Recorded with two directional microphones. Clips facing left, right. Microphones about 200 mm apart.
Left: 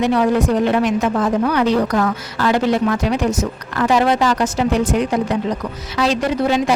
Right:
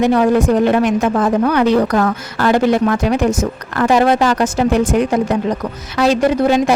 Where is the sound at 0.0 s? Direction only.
50° right (ahead or behind).